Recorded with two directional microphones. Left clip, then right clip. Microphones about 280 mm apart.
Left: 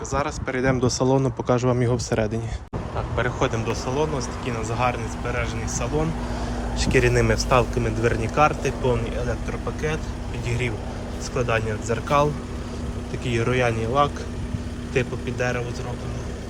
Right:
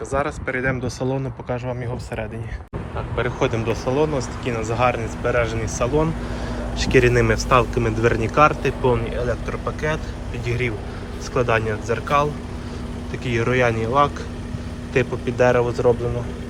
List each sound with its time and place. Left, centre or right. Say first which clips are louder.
0.1 s a man's voice: right 2 dB; centre